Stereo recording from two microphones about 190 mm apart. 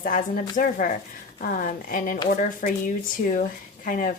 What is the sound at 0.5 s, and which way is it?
A woman's voice, 45° left (ahead or behind).